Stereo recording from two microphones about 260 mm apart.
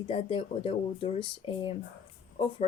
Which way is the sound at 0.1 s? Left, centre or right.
Left.